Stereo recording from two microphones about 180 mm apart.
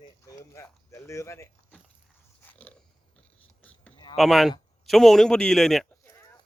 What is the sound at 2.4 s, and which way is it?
Dog, 10° left (ahead or behind).